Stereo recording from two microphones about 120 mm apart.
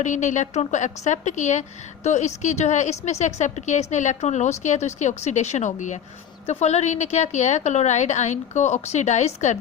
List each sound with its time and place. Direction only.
0.0 s a woman's voice: 90° left
2.0 s a woman's voice: 75° left (ahead or behind)
6.4 s a woman's voice: 65° left (ahead or behind)